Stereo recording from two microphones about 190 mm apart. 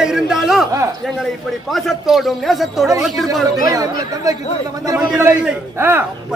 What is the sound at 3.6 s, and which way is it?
Speech, 20° right (ahead or behind).